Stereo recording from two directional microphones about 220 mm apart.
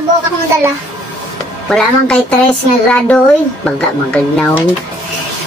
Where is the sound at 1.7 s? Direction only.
5° left (ahead or behind).